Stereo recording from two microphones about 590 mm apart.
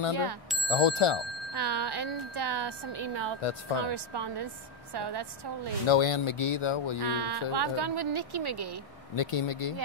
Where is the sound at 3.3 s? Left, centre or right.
Left.